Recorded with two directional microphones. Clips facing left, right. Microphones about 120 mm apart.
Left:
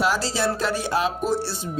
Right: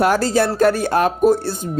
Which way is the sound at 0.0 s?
55° right (ahead or behind).